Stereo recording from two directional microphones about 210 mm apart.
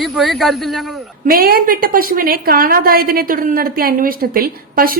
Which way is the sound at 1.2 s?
45° right (ahead or behind).